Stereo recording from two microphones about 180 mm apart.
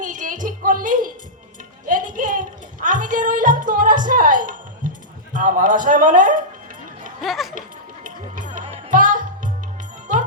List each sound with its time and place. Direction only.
0.0 s music: 45° right (ahead or behind)
5.3 s a man's voice: 45° right (ahead or behind)
7.2 s speech: centre (ahead or behind)
8.0 s music: 45° right (ahead or behind)